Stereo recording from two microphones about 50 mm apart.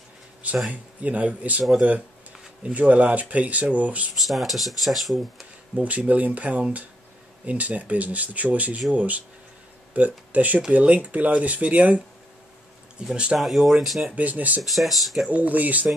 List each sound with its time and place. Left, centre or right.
0.7 s speech: right
4.1 s speech: centre
5.8 s speech: right
13.0 s speech: centre
13.4 s speech: centre
14.1 s speech: right
14.6 s speech: centre
15.3 s speech: right